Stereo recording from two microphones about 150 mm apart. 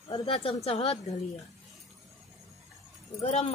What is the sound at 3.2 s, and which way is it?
Speech, 45° left (ahead or behind).